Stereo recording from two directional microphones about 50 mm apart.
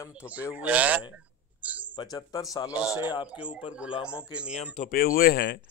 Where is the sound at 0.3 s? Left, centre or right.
Right.